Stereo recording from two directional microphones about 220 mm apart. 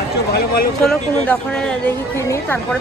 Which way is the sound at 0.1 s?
45° left (ahead or behind).